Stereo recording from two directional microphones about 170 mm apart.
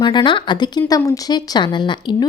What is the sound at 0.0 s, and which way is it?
A woman's voice, 30° left (ahead or behind).